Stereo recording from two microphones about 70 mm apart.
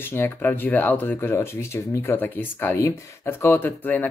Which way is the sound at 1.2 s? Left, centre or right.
Left.